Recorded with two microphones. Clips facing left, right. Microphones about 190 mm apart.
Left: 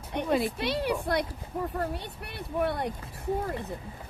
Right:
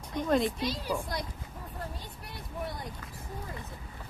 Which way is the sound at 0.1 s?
70° left (ahead or behind).